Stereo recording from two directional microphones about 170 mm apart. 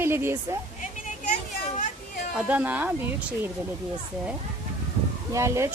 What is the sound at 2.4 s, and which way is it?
A woman's voice, 10° right (ahead or behind).